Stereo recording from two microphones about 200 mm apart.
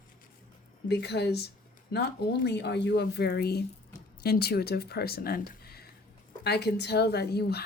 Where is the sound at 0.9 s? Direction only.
55° left (ahead or behind).